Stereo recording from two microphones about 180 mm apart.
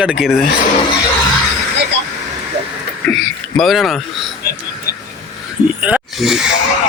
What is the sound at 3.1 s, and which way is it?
Speech, centre (ahead or behind).